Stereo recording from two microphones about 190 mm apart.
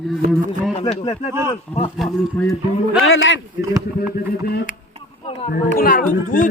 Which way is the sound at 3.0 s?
90° left.